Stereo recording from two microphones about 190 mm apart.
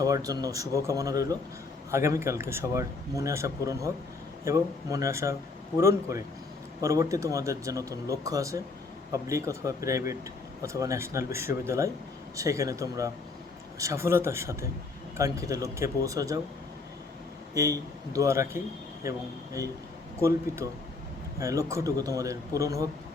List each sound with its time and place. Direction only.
0.0 s speech: 20° right (ahead or behind)
17.5 s speech: 15° right (ahead or behind)
20.6 s speech: 15° right (ahead or behind)